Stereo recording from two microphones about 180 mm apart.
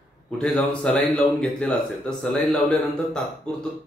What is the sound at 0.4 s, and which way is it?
A man's voice, 5° left (ahead or behind).